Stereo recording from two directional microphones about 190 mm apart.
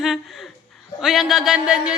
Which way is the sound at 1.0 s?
Centre (ahead or behind).